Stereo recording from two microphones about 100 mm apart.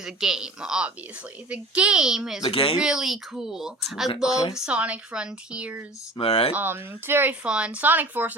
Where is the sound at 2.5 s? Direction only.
70° left (ahead or behind).